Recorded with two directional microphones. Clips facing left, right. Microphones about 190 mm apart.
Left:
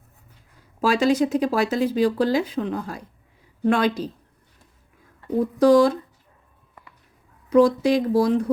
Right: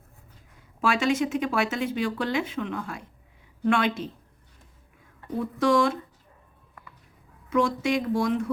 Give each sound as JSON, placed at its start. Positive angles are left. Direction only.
{"t": 0.8, "sound": "speech", "side_deg": 35}
{"t": 5.4, "sound": "speech", "side_deg": 35}
{"t": 7.5, "sound": "speech", "side_deg": 35}